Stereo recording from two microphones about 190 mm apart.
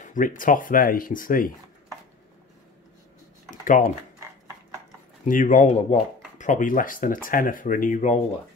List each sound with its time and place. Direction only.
0.0 s speech: 40° left (ahead or behind)
3.4 s computer keyboard: 45° left (ahead or behind)
5.2 s speech: 45° left (ahead or behind)